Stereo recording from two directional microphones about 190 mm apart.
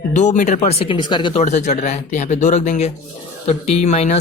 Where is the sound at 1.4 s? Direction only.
40° left (ahead or behind).